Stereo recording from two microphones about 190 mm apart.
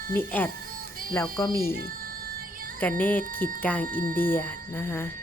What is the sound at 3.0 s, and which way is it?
A woman's voice, 10° left (ahead or behind).